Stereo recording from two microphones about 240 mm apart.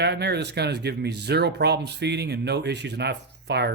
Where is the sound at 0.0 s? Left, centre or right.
Right.